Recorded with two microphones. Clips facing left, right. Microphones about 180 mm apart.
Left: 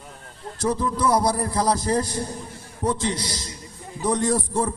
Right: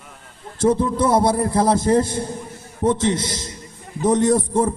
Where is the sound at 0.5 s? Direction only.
25° right (ahead or behind).